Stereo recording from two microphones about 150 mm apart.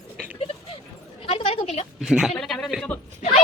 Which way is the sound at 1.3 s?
35° left (ahead or behind).